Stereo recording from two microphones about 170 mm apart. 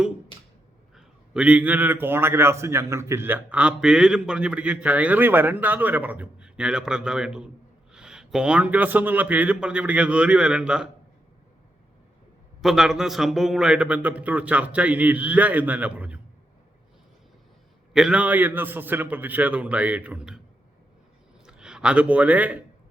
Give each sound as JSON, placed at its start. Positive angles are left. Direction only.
{"t": 0.3, "sound": "a sound", "side_deg": 30}
{"t": 0.9, "sound": "a man's voice", "side_deg": -5}
{"t": 12.6, "sound": "a man's voice", "side_deg": -5}
{"t": 17.9, "sound": "a man's voice", "side_deg": -5}
{"t": 21.4, "sound": "speech", "side_deg": -5}